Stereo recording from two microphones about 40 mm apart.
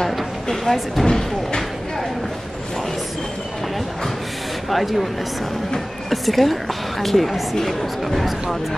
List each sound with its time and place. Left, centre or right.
0.0 s a sound: centre
1.0 s speech: centre
4.6 s a woman's voice: centre
6.0 s a woman's voice: centre